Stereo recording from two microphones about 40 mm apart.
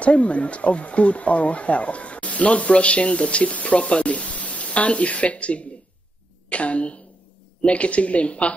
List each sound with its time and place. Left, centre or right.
0.0 s speech: left